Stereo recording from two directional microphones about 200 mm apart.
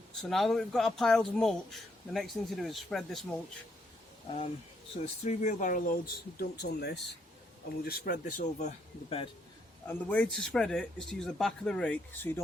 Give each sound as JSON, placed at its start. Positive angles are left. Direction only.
{"t": 0.2, "sound": "speech", "side_deg": 0}
{"t": 4.9, "sound": "speech", "side_deg": 35}
{"t": 9.0, "sound": "a man's voice", "side_deg": 25}
{"t": 9.8, "sound": "speech", "side_deg": 5}